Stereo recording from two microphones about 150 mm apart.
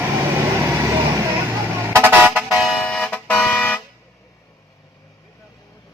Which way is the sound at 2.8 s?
10° left (ahead or behind).